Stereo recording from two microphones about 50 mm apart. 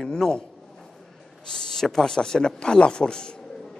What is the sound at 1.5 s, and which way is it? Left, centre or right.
A man's voice, centre.